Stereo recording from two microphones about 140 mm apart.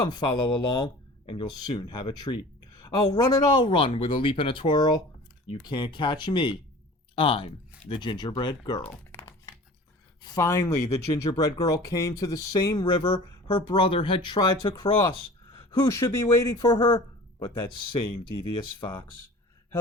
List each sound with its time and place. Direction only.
0.0 s speech: 30° left (ahead or behind)
9.1 s a sound: 15° left (ahead or behind)
10.3 s speech: 20° left (ahead or behind)
18.5 s speech: 30° left (ahead or behind)